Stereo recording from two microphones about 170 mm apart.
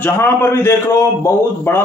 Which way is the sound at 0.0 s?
15° left (ahead or behind).